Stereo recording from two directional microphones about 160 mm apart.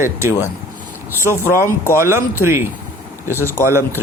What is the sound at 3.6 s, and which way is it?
Speech, 15° right (ahead or behind).